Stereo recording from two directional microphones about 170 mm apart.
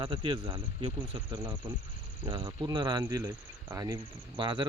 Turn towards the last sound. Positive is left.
turn(degrees=-25)  # may be behind; listen again after turning